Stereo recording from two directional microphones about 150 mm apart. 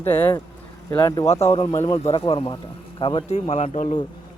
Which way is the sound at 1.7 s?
20° left (ahead or behind).